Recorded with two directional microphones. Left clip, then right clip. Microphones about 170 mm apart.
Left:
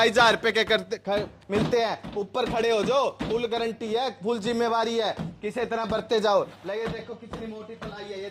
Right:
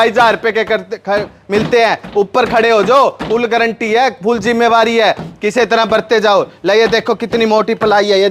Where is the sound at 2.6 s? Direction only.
35° right (ahead or behind).